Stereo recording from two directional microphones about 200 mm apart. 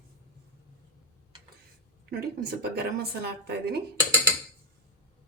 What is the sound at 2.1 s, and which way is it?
A woman's voice, 50° right (ahead or behind).